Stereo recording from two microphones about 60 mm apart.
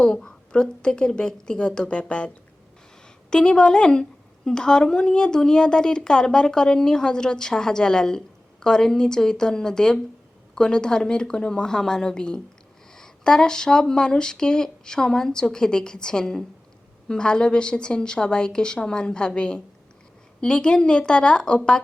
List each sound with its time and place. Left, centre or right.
0.0 s a woman's voice: centre